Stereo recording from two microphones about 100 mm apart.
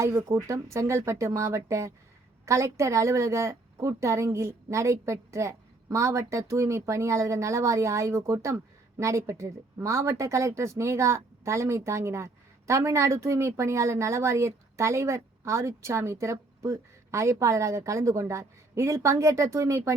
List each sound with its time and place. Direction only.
0.0 s a woman's voice: 30° right (ahead or behind)